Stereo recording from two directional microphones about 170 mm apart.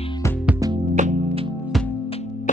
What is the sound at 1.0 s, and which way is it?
Music, 45° right (ahead or behind).